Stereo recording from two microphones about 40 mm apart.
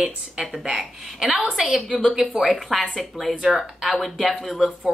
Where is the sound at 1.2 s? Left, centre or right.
Centre.